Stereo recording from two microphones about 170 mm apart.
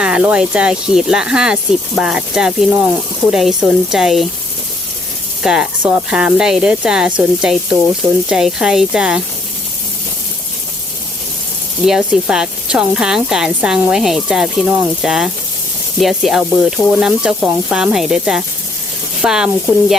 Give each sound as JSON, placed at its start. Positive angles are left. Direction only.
{"t": 0.0, "sound": "speech", "side_deg": -5}
{"t": 5.4, "sound": "speech", "side_deg": -5}
{"t": 11.9, "sound": "speech", "side_deg": -5}